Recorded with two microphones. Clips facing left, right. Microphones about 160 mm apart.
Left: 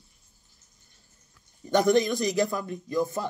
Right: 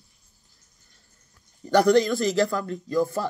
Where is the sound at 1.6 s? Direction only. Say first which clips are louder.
Right 3 dB; 20° left (ahead or behind).